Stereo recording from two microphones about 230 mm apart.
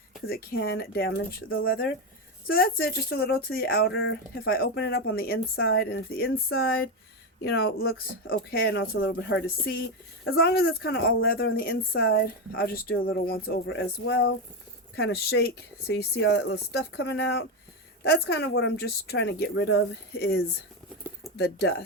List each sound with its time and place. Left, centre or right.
0.3 s speech: left